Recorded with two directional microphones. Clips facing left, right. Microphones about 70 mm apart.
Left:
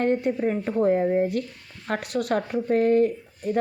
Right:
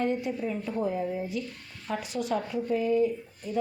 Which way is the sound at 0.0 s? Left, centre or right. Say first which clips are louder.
Left 6 dB; left.